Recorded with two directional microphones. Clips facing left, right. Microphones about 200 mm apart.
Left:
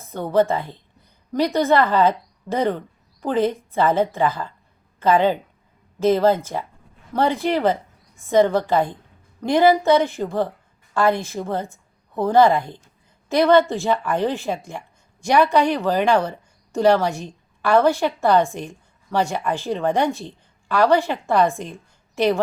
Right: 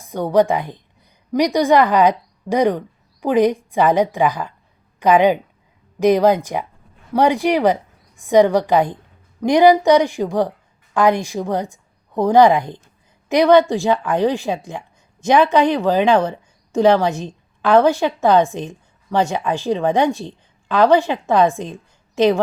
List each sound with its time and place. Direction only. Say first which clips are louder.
0.0 s a woman's voice: right 3 dB; 15° right (ahead or behind)